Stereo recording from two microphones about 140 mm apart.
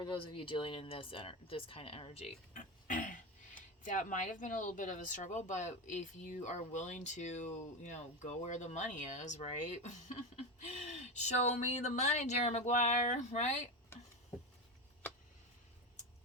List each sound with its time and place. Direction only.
0.1 s speech: 35° left (ahead or behind); by 13.7 s 60° left (ahead or behind)